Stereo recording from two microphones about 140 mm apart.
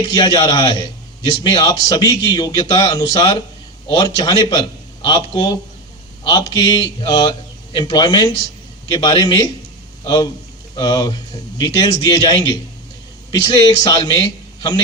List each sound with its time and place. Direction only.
0.0 s a man's voice: 30° left (ahead or behind)
10.8 s a man's voice: 25° left (ahead or behind)